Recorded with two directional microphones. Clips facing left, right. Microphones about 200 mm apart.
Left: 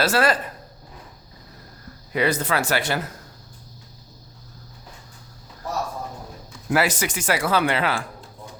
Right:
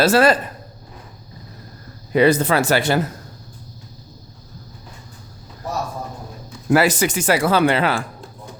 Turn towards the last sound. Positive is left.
turn(degrees=-35)  # may be behind; listen again after turning